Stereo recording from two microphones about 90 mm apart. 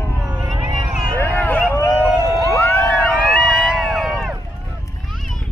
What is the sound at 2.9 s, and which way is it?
Emergency vehicle, 15° left (ahead or behind).